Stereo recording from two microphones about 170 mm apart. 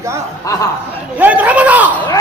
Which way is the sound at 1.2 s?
10° right (ahead or behind).